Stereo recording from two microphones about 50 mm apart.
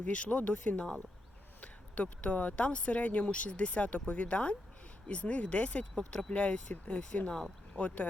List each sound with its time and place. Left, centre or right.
0.1 s speech: left
6.0 s speech: centre
6.3 s speech: left